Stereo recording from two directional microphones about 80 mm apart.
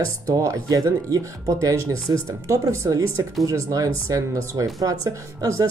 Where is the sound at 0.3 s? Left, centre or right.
Right.